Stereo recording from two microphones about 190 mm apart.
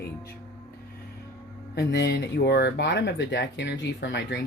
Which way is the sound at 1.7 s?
60° left (ahead or behind).